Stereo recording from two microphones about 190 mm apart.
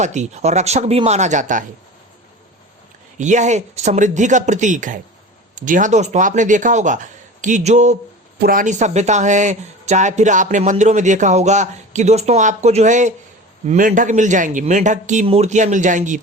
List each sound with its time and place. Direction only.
0.0 s speech: 40° right (ahead or behind)
3.2 s speech: 40° right (ahead or behind)
8.4 s speech: 45° right (ahead or behind)